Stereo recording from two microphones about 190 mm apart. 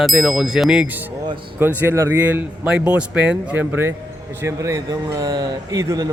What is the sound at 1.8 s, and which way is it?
A man's voice, 15° right (ahead or behind).